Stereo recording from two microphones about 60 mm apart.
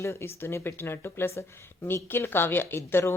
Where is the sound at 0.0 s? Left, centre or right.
Left.